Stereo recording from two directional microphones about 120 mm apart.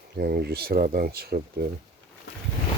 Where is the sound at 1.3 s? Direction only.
90° right.